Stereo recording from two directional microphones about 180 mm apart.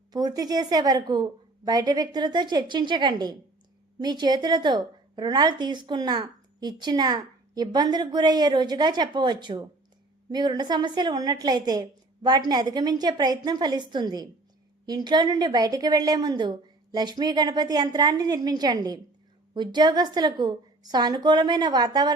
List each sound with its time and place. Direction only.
0.1 s a woman's voice: 20° right (ahead or behind)